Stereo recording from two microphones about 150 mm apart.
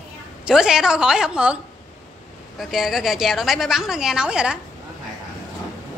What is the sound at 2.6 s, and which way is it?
A woman's voice, 5° right (ahead or behind).